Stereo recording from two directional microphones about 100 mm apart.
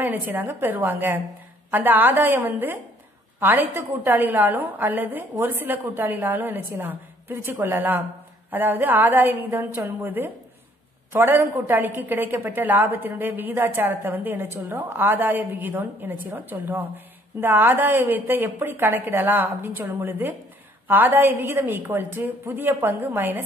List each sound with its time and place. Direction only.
0.0 s a woman's voice: 20° right (ahead or behind)